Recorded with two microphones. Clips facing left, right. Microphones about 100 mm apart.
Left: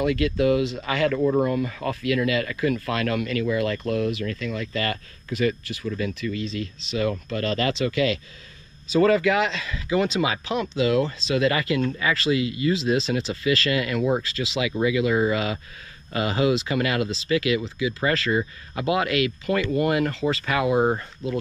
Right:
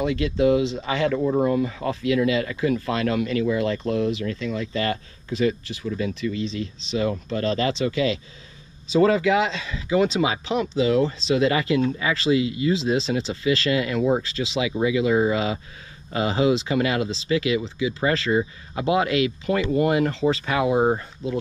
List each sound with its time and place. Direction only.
0.2 s speech: 20° right (ahead or behind)
7.9 s speech: 60° left (ahead or behind)
8.8 s speech: 25° right (ahead or behind)
19.0 s speech: 60° left (ahead or behind)
19.4 s speech: 25° right (ahead or behind)